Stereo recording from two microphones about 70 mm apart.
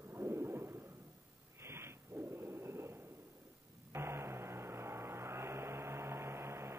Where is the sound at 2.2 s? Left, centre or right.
Right.